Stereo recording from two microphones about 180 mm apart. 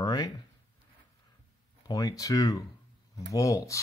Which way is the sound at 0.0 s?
20° left (ahead or behind).